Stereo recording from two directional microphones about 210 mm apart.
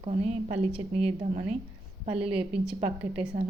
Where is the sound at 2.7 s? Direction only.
30° right (ahead or behind).